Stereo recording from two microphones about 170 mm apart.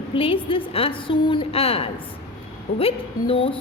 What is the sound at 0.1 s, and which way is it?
A woman's voice, 30° left (ahead or behind).